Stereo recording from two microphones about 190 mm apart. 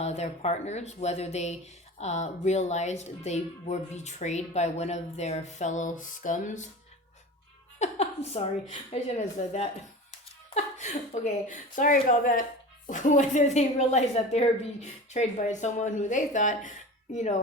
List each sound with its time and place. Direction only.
0.0 s a woman's voice: 35° left (ahead or behind)
7.8 s a woman's voice: 35° left (ahead or behind)